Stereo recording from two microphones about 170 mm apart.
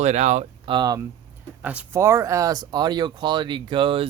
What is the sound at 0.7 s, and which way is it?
Speech, 25° right (ahead or behind).